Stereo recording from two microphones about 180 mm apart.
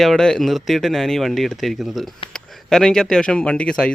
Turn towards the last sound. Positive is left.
turn(degrees=5)  # may be behind; listen again after turning